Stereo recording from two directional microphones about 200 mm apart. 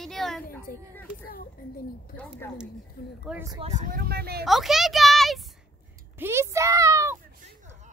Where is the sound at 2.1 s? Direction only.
10° left (ahead or behind).